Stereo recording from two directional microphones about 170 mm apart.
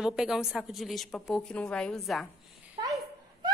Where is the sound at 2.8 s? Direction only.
20° right (ahead or behind).